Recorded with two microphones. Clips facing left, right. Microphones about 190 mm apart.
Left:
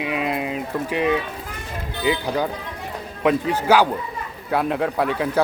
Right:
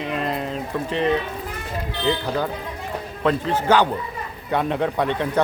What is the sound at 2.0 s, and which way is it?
A man's voice, 10° left (ahead or behind).